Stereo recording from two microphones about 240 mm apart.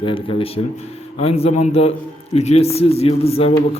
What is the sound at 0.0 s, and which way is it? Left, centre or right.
A man's voice, left.